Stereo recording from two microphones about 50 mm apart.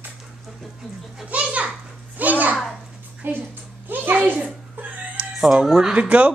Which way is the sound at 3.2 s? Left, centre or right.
Right.